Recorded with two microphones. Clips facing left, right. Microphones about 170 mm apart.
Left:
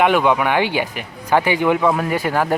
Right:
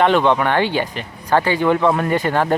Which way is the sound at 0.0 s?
10° left (ahead or behind).